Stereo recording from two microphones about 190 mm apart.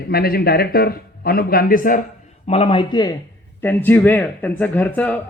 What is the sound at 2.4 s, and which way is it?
Speech, 35° left (ahead or behind).